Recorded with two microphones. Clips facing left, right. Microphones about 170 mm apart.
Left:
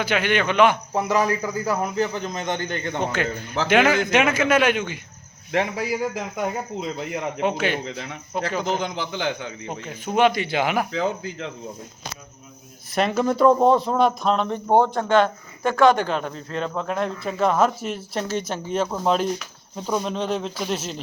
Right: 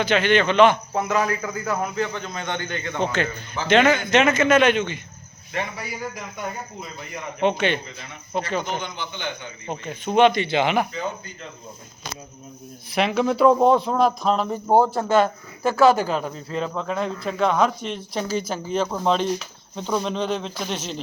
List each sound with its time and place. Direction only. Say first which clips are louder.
0.0 s a man's voice: right 3 dB; 10° left (ahead or behind)
2.4 s a man's voice: left 1 dB; 40° left (ahead or behind)
3.7 s speech: right 1 dB; 10° left (ahead or behind)
5.5 s a man's voice: left 7 dB; 90° left
7.4 s speech: right 3 dB; 5° left (ahead or behind)
7.9 s a man's voice: left 8 dB; 90° left
8.3 s speech: right 1 dB; 5° left (ahead or behind)
8.6 s a man's voice: left 4 dB; 90° left
9.8 s speech: right 2 dB; 5° left (ahead or behind)
10.9 s a man's voice: left 5 dB; 90° left
12.9 s speech: even; centre (ahead or behind)